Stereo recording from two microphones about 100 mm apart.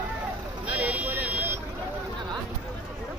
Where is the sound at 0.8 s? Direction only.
15° right (ahead or behind).